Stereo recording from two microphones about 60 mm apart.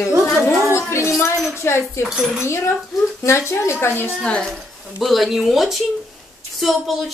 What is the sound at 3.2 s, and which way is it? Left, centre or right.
Speech, left.